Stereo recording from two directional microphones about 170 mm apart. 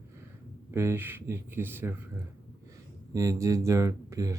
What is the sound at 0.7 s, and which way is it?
Speech, 15° right (ahead or behind).